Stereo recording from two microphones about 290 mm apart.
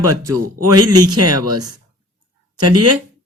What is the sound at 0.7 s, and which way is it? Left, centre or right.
Speech, right.